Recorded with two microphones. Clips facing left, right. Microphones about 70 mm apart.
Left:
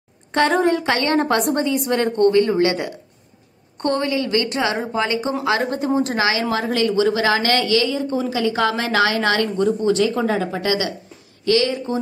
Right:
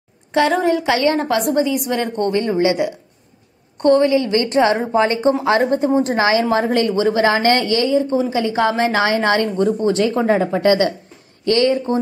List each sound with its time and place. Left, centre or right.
0.3 s a woman's voice: centre
2.1 s a woman's voice: right